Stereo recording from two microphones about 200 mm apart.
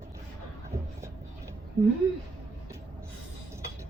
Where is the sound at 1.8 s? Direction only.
15° right (ahead or behind).